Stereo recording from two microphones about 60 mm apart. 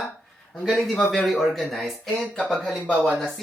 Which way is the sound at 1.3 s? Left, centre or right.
Centre.